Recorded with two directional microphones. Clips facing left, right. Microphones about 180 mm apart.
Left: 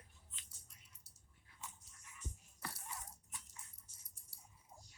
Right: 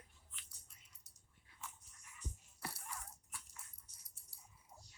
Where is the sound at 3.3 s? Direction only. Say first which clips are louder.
Right 1 dB; 20° left (ahead or behind).